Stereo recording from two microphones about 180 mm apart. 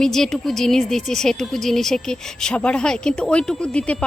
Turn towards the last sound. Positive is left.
turn(degrees=5)  # may be behind; listen again after turning